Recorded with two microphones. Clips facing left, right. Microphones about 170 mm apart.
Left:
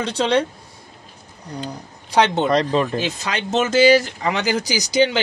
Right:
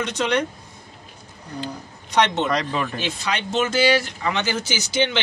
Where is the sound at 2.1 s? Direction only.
35° left (ahead or behind).